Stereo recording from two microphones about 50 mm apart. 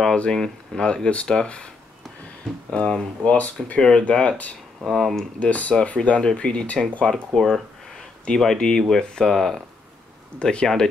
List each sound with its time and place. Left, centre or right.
0.0 s speech: centre
2.7 s speech: centre
3.6 s speech: centre
4.1 s speech: centre
4.8 s speech: centre
5.4 s speech: left
7.1 s speech: centre
10.4 s speech: centre